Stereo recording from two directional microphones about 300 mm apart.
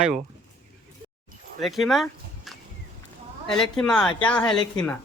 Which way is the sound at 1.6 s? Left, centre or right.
Centre.